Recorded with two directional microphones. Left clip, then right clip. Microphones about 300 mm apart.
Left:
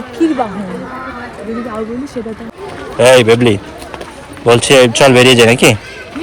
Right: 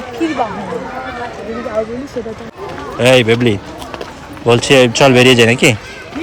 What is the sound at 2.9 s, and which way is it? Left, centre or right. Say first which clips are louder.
Speech: left 4 dB; centre.